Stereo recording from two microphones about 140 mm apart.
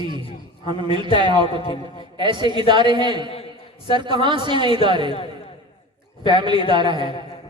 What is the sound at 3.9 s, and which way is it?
A man's voice, 35° right (ahead or behind).